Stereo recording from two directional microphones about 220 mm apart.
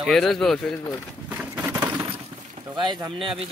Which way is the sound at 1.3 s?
5° right (ahead or behind).